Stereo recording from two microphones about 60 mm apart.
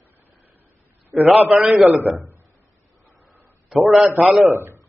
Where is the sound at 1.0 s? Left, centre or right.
Right.